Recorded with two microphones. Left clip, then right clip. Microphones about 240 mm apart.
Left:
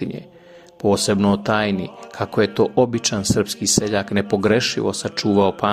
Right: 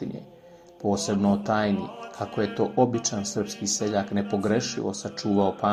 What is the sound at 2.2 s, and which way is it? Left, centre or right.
Speech, left.